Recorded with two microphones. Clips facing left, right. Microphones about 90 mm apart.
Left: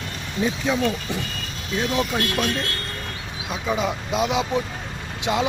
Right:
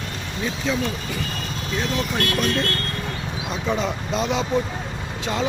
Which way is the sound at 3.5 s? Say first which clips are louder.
Left 1 dB; 5° left (ahead or behind).